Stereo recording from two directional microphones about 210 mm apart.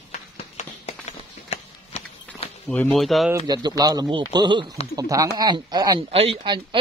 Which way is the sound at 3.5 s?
20° right (ahead or behind).